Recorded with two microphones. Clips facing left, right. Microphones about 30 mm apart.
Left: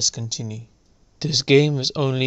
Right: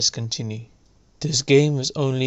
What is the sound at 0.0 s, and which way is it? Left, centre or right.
Speech, right.